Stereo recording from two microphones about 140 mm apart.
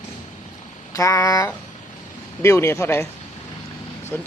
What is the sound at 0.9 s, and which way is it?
Speech, 20° left (ahead or behind).